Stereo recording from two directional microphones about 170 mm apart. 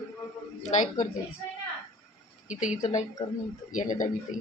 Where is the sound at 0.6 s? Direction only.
45° left (ahead or behind).